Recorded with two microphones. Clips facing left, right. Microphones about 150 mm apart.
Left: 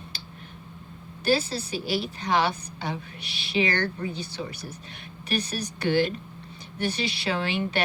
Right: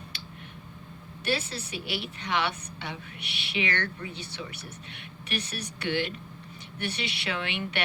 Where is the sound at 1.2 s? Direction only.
35° left (ahead or behind).